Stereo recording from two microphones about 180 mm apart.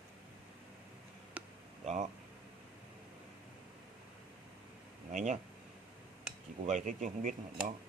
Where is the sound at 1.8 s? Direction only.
40° right (ahead or behind).